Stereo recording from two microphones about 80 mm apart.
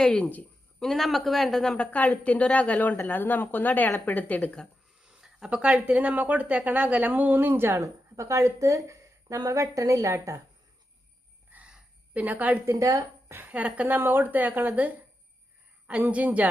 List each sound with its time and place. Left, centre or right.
0.0 s speech: centre
0.8 s a woman's voice: centre
5.0 s speech: centre; by 7.9 s right
8.1 s a woman's voice: right
11.5 s a sound: centre
12.6 s speech: right
13.5 s speech: centre